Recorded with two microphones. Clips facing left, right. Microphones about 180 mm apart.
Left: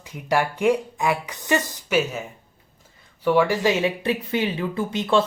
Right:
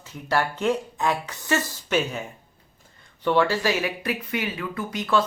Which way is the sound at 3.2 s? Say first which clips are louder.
Left 2 dB; 10° left (ahead or behind).